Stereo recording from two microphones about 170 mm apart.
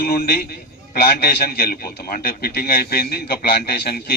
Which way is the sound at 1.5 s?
60° left (ahead or behind).